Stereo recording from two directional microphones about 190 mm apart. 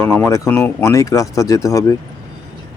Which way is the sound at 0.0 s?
10° left (ahead or behind).